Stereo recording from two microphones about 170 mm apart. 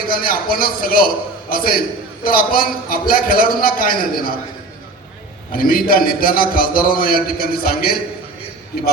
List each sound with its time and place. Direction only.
0.1 s a man's voice: 60° left (ahead or behind)
5.5 s a man's voice: 60° left (ahead or behind)